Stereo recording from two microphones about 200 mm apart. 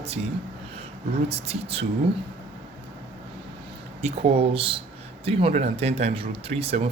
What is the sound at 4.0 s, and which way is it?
Speech, 30° right (ahead or behind).